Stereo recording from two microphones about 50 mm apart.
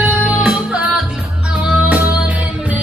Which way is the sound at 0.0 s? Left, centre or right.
Right.